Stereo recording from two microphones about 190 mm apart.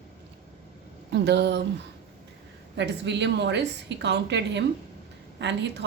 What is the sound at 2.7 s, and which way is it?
A woman's voice, 65° right (ahead or behind).